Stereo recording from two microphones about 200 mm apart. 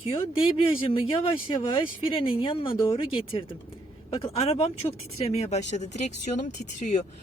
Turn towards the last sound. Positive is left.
turn(degrees=35)  # may be behind; listen again after turning